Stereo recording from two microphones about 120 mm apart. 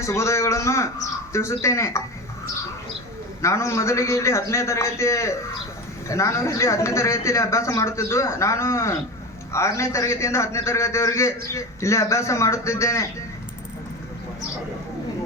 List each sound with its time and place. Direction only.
0.0 s a man's voice: 25° left (ahead or behind)
3.4 s a man's voice: 25° left (ahead or behind)